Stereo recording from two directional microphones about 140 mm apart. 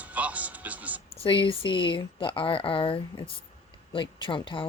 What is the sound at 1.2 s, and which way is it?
Speech, 35° left (ahead or behind).